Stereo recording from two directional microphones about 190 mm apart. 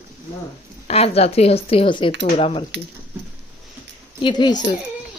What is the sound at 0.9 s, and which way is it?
Speech, 30° left (ahead or behind).